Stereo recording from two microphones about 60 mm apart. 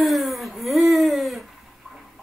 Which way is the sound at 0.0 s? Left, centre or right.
Centre.